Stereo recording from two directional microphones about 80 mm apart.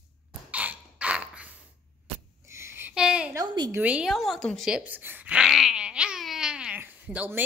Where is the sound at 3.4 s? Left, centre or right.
Right.